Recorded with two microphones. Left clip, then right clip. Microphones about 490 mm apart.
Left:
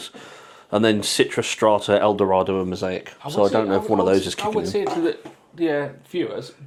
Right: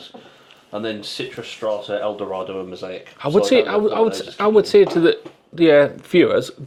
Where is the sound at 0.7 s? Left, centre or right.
Left.